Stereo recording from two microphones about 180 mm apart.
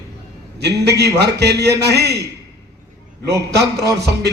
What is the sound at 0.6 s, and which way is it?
A man's voice, 65° right (ahead or behind).